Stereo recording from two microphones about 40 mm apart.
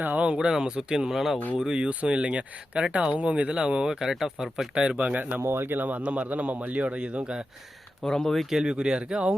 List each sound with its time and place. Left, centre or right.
0.3 s speech: centre
1.7 s a man's voice: right
4.0 s speech: centre
4.7 s speech: right
5.4 s speech: right
6.0 s a man's voice: right
8.0 s speech: centre
8.4 s speech: centre
8.7 s speech: right